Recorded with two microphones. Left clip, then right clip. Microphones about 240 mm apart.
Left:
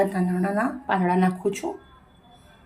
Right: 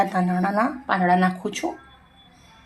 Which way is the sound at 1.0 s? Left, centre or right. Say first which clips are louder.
Right 6 dB; centre.